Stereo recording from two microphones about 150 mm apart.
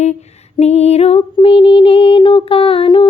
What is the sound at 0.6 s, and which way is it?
Music, 45° left (ahead or behind).